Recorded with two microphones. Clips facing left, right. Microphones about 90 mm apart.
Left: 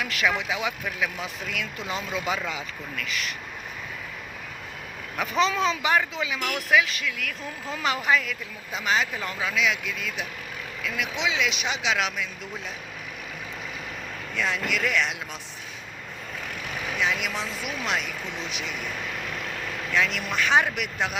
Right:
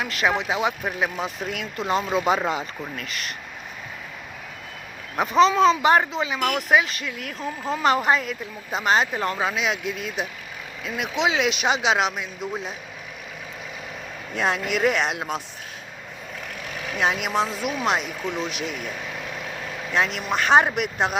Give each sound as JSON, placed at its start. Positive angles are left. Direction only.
{"t": 0.0, "sound": "speech", "side_deg": -30}
{"t": 1.2, "sound": "speech", "side_deg": -45}
{"t": 5.1, "sound": "speech", "side_deg": -30}
{"t": 11.3, "sound": "speech", "side_deg": -55}
{"t": 11.9, "sound": "speech", "side_deg": -35}
{"t": 14.3, "sound": "speech", "side_deg": -45}
{"t": 15.1, "sound": "speech", "side_deg": -55}
{"t": 17.0, "sound": "speech", "side_deg": -50}
{"t": 19.9, "sound": "speech", "side_deg": -35}